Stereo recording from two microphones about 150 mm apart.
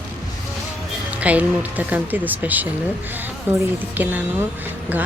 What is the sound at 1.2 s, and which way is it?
Speech, 10° right (ahead or behind).